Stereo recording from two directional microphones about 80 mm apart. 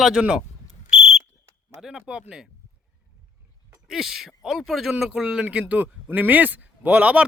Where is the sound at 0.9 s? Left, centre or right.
Centre.